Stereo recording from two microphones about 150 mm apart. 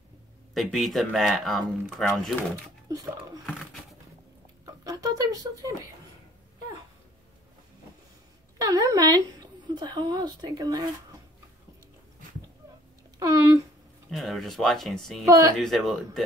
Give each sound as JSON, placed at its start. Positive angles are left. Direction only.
{"t": 0.6, "sound": "speech", "side_deg": 0}
{"t": 2.9, "sound": "speech", "side_deg": -25}
{"t": 4.8, "sound": "speech", "side_deg": -25}
{"t": 8.5, "sound": "speech", "side_deg": -25}
{"t": 13.2, "sound": "speech", "side_deg": -20}
{"t": 14.1, "sound": "speech", "side_deg": 0}
{"t": 15.2, "sound": "speech", "side_deg": -25}
{"t": 15.5, "sound": "speech", "side_deg": 0}